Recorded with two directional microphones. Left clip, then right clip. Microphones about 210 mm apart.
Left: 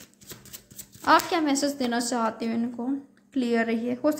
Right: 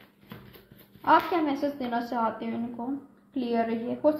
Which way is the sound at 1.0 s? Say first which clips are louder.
Left 1 dB; 45° left (ahead or behind).